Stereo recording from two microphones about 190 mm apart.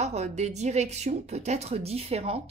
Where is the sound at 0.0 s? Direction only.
35° right (ahead or behind).